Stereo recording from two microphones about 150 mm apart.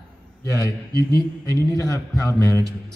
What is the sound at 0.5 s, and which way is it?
A man's voice, 20° left (ahead or behind).